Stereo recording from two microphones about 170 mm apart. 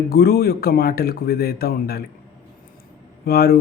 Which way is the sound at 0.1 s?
70° left (ahead or behind).